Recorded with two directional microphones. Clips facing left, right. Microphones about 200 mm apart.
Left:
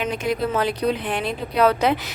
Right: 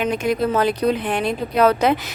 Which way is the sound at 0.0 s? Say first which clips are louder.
Right 3 dB; 45° right (ahead or behind).